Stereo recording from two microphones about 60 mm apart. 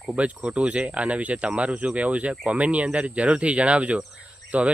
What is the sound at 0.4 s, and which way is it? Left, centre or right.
Speech, centre.